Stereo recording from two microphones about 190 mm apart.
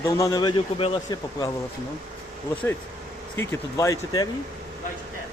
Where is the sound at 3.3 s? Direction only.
15° left (ahead or behind).